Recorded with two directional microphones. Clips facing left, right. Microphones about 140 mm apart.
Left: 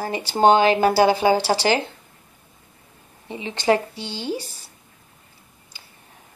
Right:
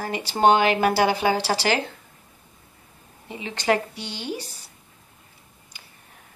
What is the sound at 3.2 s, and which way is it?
Speech, 25° left (ahead or behind).